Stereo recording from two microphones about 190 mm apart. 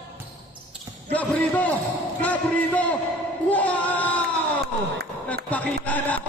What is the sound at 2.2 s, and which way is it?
Speech, 5° left (ahead or behind).